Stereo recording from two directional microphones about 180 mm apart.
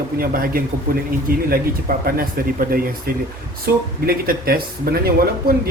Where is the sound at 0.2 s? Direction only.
55° right (ahead or behind).